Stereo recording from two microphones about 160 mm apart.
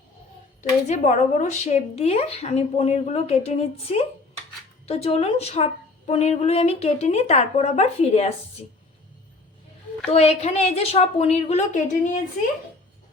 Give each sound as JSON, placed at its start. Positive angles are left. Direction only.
{"t": 0.6, "sound": "a woman's voice", "side_deg": 50}
{"t": 10.2, "sound": "a woman's voice", "side_deg": 40}